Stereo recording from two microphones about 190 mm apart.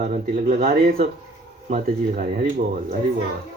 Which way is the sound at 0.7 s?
50° right (ahead or behind).